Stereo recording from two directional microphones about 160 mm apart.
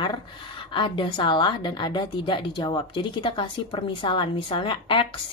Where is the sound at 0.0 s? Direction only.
30° left (ahead or behind).